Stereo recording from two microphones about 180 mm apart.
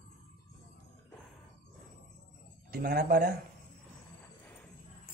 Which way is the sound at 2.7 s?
60° right (ahead or behind).